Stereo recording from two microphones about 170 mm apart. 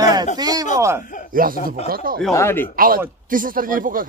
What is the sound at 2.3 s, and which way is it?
Speech, 15° left (ahead or behind).